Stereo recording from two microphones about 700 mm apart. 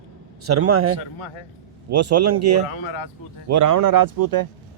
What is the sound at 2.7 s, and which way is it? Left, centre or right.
Speech, left.